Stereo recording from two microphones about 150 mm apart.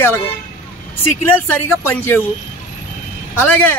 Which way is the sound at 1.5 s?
10° left (ahead or behind).